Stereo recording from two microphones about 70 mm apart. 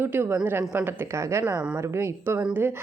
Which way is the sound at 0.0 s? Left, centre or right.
Right.